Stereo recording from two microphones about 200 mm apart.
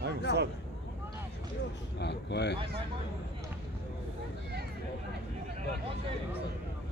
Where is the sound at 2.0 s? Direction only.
60° left (ahead or behind).